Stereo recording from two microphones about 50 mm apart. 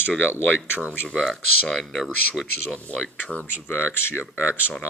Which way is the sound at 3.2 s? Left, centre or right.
Left.